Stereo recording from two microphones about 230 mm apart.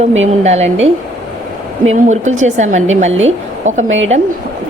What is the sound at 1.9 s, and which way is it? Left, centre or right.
A woman's voice, right.